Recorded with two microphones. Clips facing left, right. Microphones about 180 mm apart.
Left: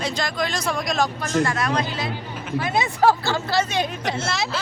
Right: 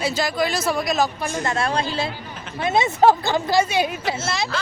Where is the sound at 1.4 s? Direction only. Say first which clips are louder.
Even; 30° right (ahead or behind).